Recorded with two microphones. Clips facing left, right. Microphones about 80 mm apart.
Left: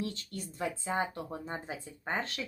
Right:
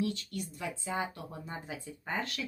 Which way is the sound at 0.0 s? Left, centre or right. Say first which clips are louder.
Right 4 dB; left.